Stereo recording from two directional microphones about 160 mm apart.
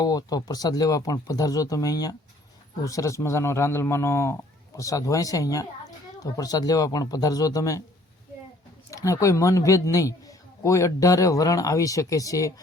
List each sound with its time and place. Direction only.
0.0 s a man's voice: 25° left (ahead or behind)
8.9 s a man's voice: 20° left (ahead or behind)